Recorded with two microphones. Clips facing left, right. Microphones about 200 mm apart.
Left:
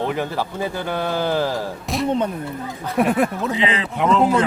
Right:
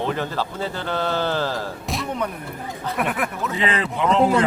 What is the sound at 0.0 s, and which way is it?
A man's voice, 15° left (ahead or behind).